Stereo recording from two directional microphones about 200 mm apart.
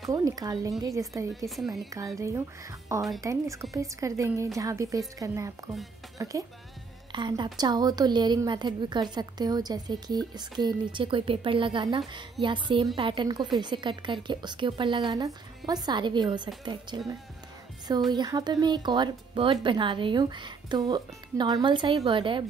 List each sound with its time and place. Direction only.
0.1 s a woman's voice: 20° right (ahead or behind)
1.5 s speech: centre (ahead or behind)
2.1 s a woman's voice: 15° right (ahead or behind)
18.1 s speech: 20° right (ahead or behind)